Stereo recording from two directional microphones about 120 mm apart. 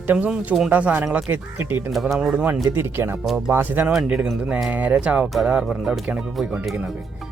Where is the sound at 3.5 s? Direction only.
20° right (ahead or behind).